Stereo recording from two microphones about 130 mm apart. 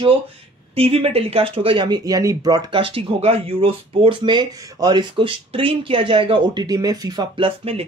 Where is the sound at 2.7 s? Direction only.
45° right (ahead or behind).